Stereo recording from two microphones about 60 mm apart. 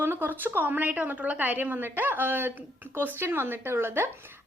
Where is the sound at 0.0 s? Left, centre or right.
Right.